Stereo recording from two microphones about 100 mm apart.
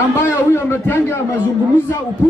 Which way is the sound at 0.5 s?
25° left (ahead or behind).